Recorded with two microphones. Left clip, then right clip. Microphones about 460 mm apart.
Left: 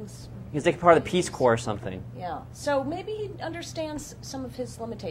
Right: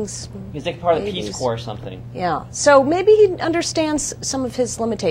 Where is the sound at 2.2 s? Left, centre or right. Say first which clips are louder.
Right 17 dB; right.